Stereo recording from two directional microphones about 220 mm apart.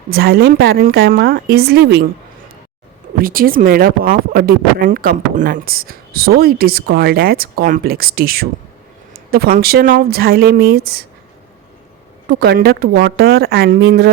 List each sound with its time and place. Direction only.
0.1 s a woman's voice: 45° right (ahead or behind)
3.2 s a woman's voice: 40° right (ahead or behind)
12.3 s a woman's voice: 45° right (ahead or behind)